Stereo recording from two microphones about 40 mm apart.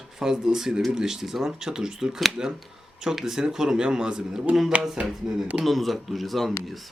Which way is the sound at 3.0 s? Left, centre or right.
Centre.